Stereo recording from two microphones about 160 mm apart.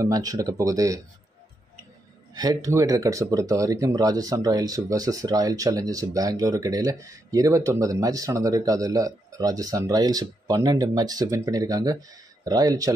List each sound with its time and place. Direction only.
0.0 s speech: 20° right (ahead or behind)
2.3 s speech: 25° right (ahead or behind)